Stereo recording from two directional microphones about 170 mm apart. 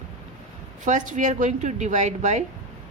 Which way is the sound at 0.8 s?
50° right (ahead or behind).